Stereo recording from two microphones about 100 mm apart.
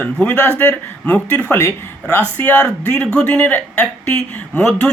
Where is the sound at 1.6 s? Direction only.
25° left (ahead or behind).